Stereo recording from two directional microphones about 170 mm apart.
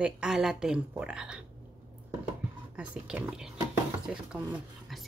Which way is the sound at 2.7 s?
5° right (ahead or behind).